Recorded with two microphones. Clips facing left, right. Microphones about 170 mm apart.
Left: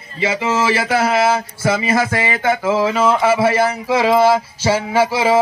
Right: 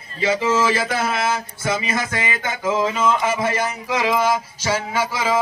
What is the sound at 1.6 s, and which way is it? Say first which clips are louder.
Speech: left 7 dB; 30° left (ahead or behind).